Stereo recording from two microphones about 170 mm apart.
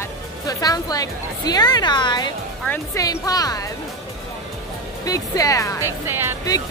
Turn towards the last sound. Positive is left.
turn(degrees=-15)  # may be behind; listen again after turning